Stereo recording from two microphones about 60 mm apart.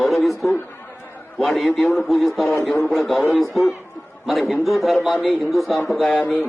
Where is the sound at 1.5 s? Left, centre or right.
Centre.